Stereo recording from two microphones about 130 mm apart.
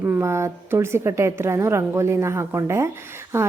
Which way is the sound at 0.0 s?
20° right (ahead or behind).